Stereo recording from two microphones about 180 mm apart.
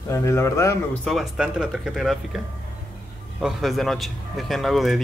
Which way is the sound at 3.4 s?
Centre (ahead or behind).